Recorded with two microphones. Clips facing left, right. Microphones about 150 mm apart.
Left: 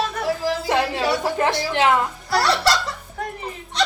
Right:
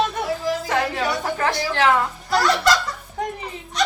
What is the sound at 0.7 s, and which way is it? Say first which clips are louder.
A woman's voice: left 4 dB; 25° left (ahead or behind).